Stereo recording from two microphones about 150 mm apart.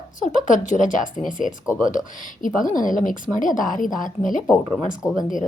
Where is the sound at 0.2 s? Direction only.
60° left (ahead or behind).